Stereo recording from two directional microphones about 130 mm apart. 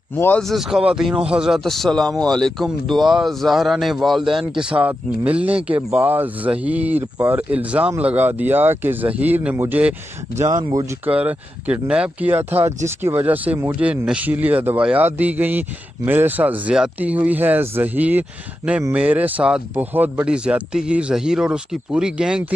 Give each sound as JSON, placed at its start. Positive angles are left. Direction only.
{"t": 0.4, "sound": "speech", "side_deg": 0}
{"t": 11.1, "sound": "speech", "side_deg": -10}